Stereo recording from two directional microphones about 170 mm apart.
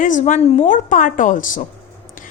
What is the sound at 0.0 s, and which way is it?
A woman's voice, 50° left (ahead or behind).